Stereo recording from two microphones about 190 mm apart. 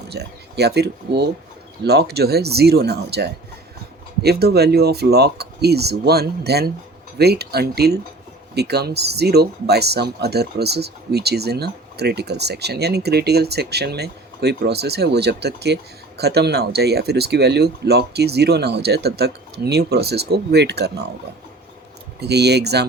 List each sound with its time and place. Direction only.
0.1 s speech: 60° right (ahead or behind)
22.2 s speech: 60° right (ahead or behind)